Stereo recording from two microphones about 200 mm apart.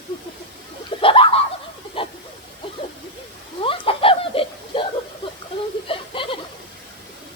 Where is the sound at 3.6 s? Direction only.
25° left (ahead or behind).